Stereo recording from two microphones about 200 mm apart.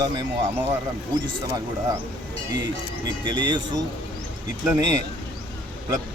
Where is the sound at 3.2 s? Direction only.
20° right (ahead or behind).